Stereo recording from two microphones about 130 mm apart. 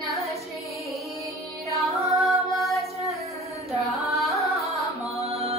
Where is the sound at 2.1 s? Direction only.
Centre (ahead or behind).